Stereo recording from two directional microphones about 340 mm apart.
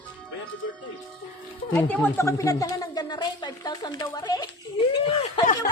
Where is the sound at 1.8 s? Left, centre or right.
Centre.